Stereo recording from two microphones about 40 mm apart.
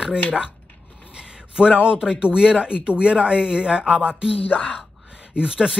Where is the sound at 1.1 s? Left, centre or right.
Right.